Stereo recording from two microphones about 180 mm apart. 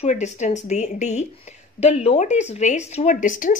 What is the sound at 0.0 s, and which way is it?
Speech, 40° left (ahead or behind).